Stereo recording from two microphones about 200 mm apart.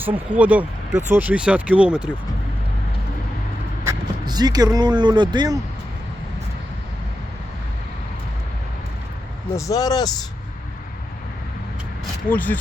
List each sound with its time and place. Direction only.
0.3 s speech: 5° right (ahead or behind)
3.8 s speech: 20° right (ahead or behind)
9.6 s speech: 15° left (ahead or behind)
12.3 s speech: 10° left (ahead or behind)